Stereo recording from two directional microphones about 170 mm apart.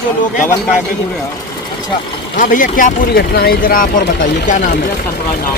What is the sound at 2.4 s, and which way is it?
Speech, 50° left (ahead or behind).